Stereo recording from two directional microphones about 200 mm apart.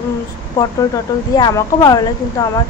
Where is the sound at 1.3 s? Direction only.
15° left (ahead or behind).